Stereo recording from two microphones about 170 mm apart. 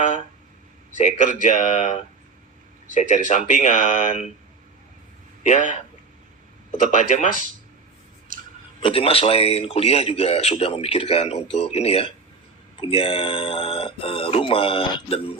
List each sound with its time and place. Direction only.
0.9 s a man's voice: 45° left (ahead or behind)
5.4 s speech: 45° left (ahead or behind)
6.9 s speech: 45° left (ahead or behind)
8.8 s a man's voice: 35° left (ahead or behind)